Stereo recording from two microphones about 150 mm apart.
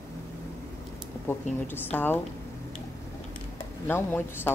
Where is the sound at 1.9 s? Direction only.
15° left (ahead or behind).